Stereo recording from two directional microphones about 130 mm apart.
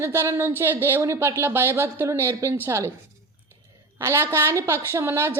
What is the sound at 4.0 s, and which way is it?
Speech, 20° right (ahead or behind).